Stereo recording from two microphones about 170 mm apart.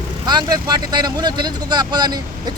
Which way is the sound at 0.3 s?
25° right (ahead or behind).